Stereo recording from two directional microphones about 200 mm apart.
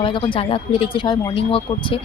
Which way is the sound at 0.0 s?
25° left (ahead or behind).